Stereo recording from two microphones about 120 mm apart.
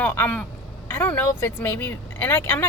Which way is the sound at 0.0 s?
15° left (ahead or behind).